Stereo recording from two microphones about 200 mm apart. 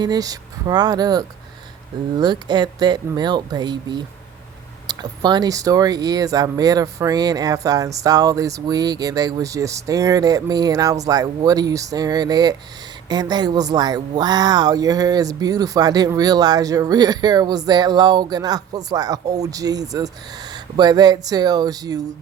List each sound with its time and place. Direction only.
0.0 s speech: 20° right (ahead or behind)